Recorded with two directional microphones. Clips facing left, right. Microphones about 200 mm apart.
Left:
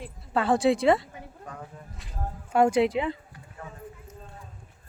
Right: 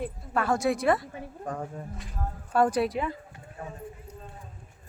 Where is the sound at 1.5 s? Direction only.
40° right (ahead or behind).